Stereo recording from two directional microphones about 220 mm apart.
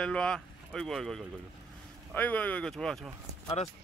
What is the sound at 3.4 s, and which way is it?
Speech, 25° left (ahead or behind).